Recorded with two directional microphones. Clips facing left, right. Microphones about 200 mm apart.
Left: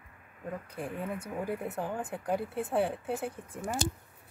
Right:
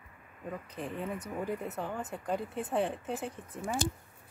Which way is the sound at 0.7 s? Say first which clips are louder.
Even; 10° left (ahead or behind).